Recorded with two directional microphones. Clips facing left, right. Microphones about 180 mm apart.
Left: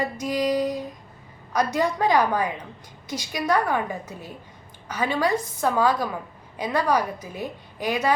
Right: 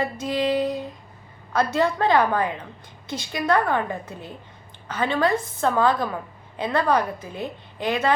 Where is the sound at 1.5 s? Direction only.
15° left (ahead or behind).